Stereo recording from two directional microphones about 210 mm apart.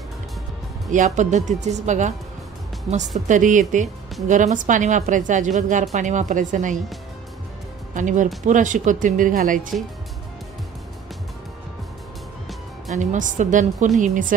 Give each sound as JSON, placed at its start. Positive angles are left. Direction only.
{"t": 0.9, "sound": "speech", "side_deg": -35}
{"t": 3.3, "sound": "speech", "side_deg": -35}
{"t": 7.9, "sound": "speech", "side_deg": -35}
{"t": 12.9, "sound": "speech", "side_deg": -35}